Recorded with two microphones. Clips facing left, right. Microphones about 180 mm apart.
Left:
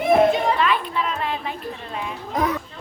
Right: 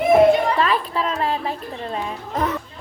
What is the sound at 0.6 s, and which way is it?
Speech, 35° right (ahead or behind).